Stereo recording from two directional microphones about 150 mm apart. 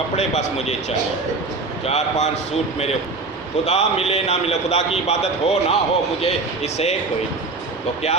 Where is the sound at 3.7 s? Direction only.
45° left (ahead or behind).